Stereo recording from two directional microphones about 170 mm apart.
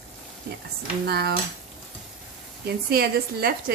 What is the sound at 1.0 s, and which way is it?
Speech, 70° right (ahead or behind).